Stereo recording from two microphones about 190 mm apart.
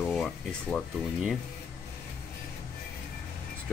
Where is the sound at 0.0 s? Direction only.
Centre (ahead or behind).